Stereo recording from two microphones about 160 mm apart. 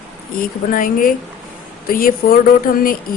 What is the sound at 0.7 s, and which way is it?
Speech, 60° left (ahead or behind).